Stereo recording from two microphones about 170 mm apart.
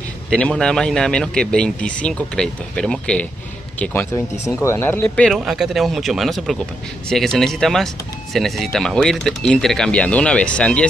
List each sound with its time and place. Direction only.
0.3 s speech: 5° left (ahead or behind)